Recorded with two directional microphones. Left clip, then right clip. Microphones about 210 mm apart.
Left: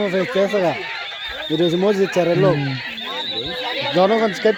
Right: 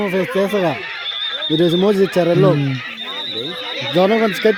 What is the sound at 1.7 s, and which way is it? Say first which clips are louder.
Speech: right 1 dB; 45° right (ahead or behind).